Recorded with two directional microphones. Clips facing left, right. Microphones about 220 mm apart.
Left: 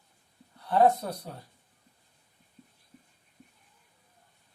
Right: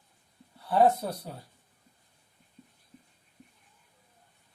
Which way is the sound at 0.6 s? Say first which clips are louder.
Even; 5° right (ahead or behind).